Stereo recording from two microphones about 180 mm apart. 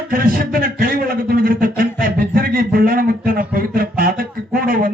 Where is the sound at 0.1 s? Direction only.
50° right (ahead or behind).